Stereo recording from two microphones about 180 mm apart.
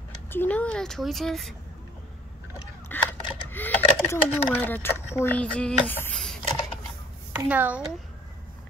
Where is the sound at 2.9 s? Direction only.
10° left (ahead or behind).